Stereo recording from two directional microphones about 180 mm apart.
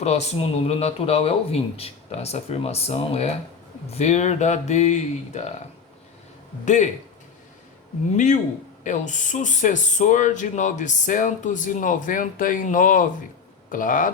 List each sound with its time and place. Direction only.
0.0 s speech: 35° left (ahead or behind)
6.7 s speech: 40° left (ahead or behind)
8.1 s speech: 40° left (ahead or behind)